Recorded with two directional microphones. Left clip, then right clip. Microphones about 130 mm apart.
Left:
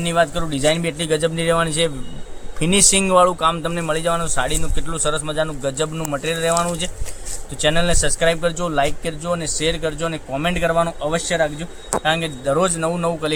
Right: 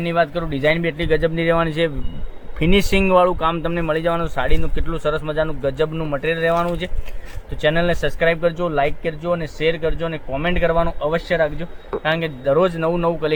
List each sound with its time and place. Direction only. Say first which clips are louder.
0.0 s a man's voice: left 1 dB; 40° right (ahead or behind); by 13.3 s 65° right (ahead or behind)